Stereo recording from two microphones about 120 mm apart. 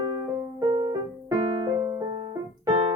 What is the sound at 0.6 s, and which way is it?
Music, 35° right (ahead or behind).